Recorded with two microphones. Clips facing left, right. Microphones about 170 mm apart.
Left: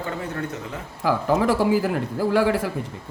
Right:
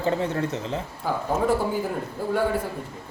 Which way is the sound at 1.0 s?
90° left.